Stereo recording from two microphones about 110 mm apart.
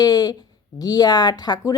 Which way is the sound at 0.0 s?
35° left (ahead or behind).